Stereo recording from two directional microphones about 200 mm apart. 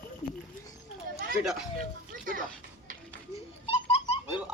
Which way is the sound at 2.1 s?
45° right (ahead or behind).